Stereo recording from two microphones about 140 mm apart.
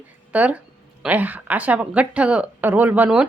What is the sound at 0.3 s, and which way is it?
A woman's voice, 10° right (ahead or behind).